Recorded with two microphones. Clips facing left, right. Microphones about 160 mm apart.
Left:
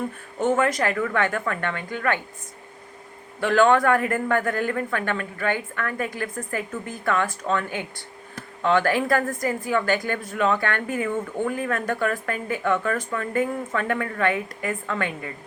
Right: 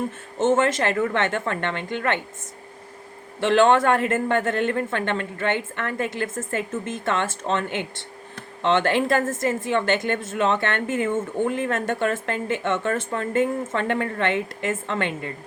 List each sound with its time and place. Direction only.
0.3 s speech: 25° right (ahead or behind)
3.4 s speech: 25° right (ahead or behind)